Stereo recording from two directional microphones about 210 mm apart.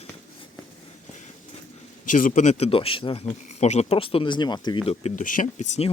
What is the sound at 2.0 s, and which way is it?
Speech, 40° left (ahead or behind).